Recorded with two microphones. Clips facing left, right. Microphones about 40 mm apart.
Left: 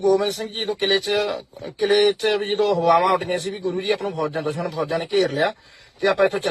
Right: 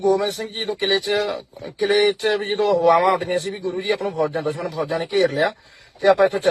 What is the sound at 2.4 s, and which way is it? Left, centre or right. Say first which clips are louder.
Speech: right 2 dB; right.